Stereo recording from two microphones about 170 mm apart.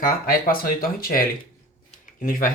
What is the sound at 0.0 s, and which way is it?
Speech, 55° left (ahead or behind).